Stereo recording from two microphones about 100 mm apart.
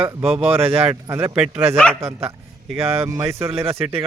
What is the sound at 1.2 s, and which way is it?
Speech, 10° right (ahead or behind).